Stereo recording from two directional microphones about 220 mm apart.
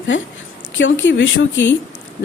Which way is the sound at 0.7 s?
60° left (ahead or behind).